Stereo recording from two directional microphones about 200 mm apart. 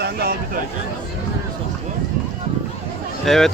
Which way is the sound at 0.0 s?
50° right (ahead or behind).